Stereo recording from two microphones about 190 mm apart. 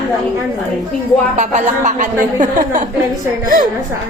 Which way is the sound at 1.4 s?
40° right (ahead or behind).